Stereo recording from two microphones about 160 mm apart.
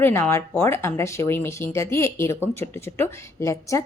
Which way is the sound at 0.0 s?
15° left (ahead or behind).